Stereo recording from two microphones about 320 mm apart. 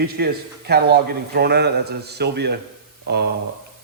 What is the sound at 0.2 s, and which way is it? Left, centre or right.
A man's voice, right.